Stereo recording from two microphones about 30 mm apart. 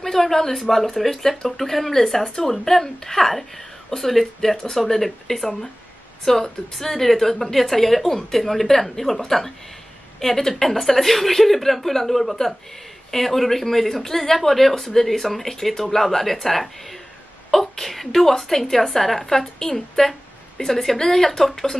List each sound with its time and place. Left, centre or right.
0.0 s a woman's voice: centre
3.9 s speech: left
4.4 s a woman's voice: centre
19.7 s a woman's voice: centre